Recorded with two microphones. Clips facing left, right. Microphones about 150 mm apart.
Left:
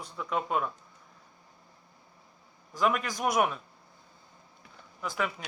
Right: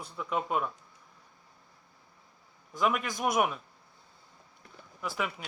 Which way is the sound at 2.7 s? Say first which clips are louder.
Left 1 dB; 5° right (ahead or behind).